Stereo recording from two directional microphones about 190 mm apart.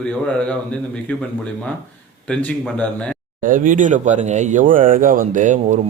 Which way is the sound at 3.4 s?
45° right (ahead or behind).